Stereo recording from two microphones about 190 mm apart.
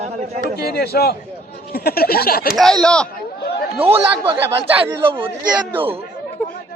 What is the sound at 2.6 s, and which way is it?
Speech, 5° left (ahead or behind).